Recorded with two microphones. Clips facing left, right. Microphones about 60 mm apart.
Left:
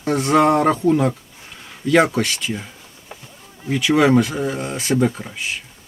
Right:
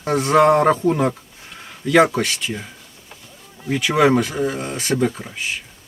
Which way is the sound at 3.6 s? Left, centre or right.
Centre.